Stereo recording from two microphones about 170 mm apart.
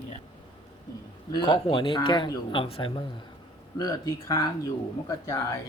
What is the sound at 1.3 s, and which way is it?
A man's voice, 25° left (ahead or behind).